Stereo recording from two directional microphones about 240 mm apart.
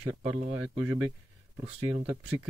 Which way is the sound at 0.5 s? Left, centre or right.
Centre.